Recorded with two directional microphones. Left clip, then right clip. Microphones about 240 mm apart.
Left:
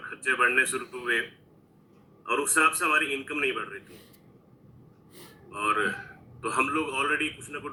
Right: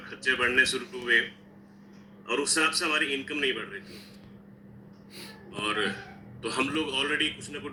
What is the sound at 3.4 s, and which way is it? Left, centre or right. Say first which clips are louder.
Speech: left 1 dB; left.